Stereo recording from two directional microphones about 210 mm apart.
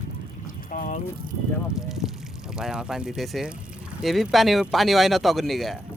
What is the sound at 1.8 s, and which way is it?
Pour, centre (ahead or behind).